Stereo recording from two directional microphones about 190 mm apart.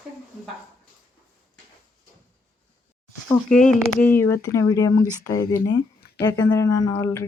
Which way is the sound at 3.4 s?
5° left (ahead or behind).